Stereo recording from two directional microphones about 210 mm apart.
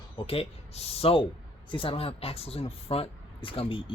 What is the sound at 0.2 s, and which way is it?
Speech, 25° left (ahead or behind).